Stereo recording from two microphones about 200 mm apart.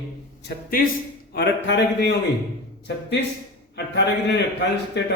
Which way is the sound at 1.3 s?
60° left (ahead or behind).